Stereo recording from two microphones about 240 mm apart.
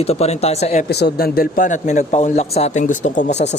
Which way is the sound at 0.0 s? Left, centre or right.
Left.